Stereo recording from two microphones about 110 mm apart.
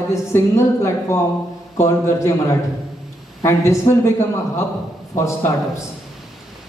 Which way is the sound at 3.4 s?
25° left (ahead or behind).